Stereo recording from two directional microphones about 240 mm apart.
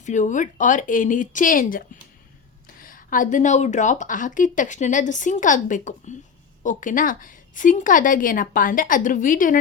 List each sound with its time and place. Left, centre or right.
0.0 s a woman's voice: left
2.8 s a woman's voice: left